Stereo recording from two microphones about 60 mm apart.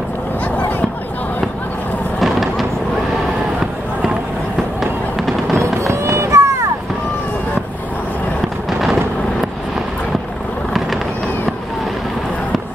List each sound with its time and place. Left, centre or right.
0.6 s a sound: left
2.1 s fireworks: centre
3.5 s fireworks: centre
5.1 s fireworks: centre
5.8 s run: right